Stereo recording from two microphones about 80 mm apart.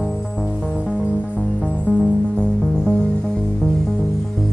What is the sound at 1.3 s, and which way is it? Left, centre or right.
Music, centre.